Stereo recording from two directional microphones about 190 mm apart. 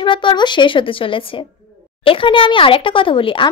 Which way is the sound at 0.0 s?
25° left (ahead or behind).